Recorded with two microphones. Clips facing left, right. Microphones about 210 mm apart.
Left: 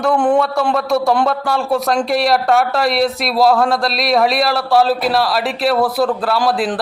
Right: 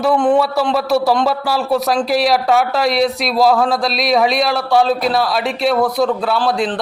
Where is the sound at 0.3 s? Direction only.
5° right (ahead or behind).